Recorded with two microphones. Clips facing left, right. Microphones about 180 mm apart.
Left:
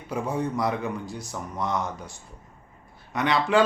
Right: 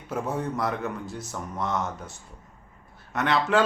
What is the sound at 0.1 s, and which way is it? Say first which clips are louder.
Speech: left 1 dB; centre (ahead or behind).